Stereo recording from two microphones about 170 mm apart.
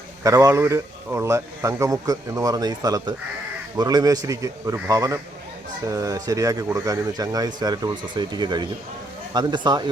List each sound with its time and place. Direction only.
0.2 s a man's voice: 20° right (ahead or behind)